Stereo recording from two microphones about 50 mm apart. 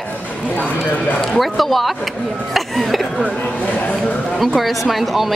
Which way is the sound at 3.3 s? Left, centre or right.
Left.